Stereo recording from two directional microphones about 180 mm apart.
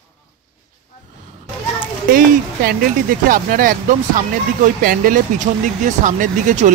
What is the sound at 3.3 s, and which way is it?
Speech, 50° right (ahead or behind).